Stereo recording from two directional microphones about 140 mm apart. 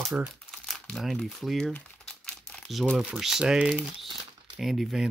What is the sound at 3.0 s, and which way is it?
Speech, 5° right (ahead or behind).